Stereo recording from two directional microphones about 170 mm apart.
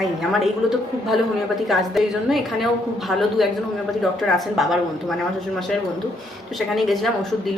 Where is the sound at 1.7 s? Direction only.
Centre (ahead or behind).